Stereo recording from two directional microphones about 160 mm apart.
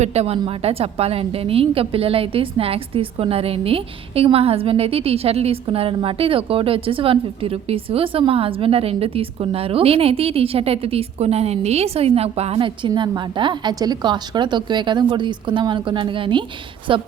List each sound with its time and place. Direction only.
0.0 s a woman's voice: 40° right (ahead or behind)